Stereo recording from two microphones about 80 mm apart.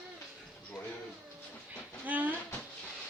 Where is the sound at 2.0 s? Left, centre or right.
Right.